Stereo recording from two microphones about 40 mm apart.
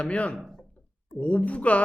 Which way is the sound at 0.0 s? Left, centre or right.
Left.